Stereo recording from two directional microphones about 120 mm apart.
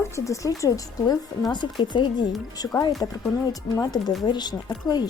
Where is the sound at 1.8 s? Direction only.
40° left (ahead or behind).